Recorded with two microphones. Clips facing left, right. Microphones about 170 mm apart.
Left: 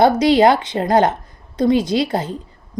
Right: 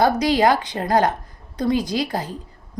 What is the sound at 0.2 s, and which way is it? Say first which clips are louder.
A woman's voice: left 5 dB; 25° left (ahead or behind).